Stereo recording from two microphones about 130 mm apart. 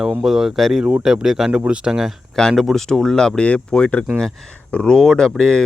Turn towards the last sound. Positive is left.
turn(degrees=5)  # may be behind; listen again after turning